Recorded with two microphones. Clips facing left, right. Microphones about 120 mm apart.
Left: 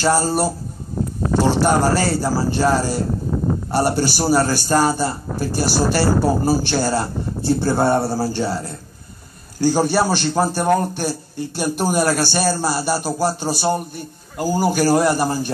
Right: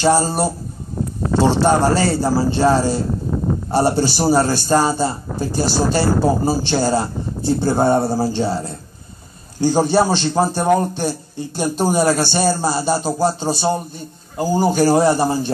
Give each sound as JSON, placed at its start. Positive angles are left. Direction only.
{"t": 0.0, "sound": "a man's voice", "side_deg": -20}